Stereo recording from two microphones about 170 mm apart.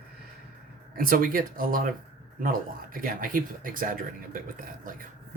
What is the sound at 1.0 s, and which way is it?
Speech, 55° right (ahead or behind).